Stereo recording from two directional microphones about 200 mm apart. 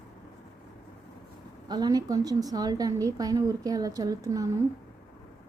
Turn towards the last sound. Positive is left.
turn(degrees=-15)  # may be behind; listen again after turning